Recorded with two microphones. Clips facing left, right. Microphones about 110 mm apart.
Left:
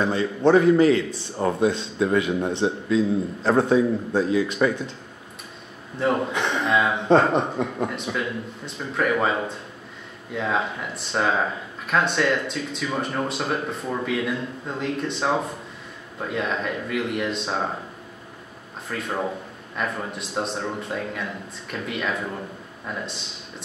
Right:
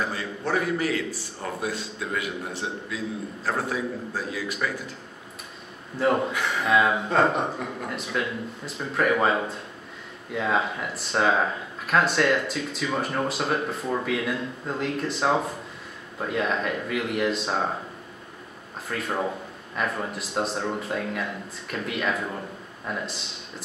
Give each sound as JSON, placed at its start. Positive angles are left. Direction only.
{"t": 0.0, "sound": "a man's voice", "side_deg": 25}
{"t": 5.9, "sound": "speech", "side_deg": 0}
{"t": 6.3, "sound": "a man's voice", "side_deg": 25}
{"t": 6.6, "sound": "speech", "side_deg": 0}
{"t": 18.9, "sound": "speech", "side_deg": 0}